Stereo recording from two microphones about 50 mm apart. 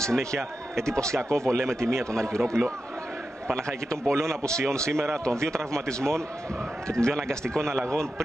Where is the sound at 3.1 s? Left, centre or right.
Centre.